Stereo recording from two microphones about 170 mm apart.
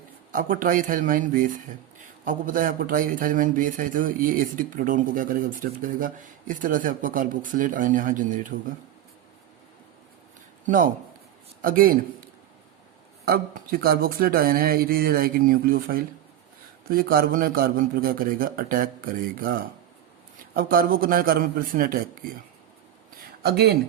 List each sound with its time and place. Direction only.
0.3 s a man's voice: 55° right (ahead or behind)
11.6 s speech: 55° right (ahead or behind)
13.2 s speech: 60° right (ahead or behind)
20.5 s speech: 55° right (ahead or behind)
23.1 s a sound: 70° right (ahead or behind)